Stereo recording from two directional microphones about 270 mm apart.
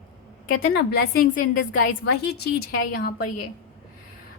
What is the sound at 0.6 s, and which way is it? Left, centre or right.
A woman's voice, left.